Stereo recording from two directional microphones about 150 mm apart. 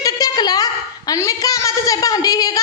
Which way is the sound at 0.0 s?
25° left (ahead or behind).